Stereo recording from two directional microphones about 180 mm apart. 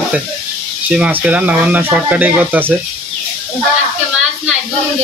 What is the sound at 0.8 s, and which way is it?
Speech, 5° right (ahead or behind).